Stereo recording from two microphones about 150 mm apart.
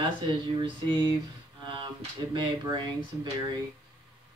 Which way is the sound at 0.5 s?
30° right (ahead or behind).